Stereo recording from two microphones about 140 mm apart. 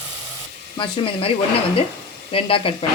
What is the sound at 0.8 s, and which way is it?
Speech, 40° left (ahead or behind).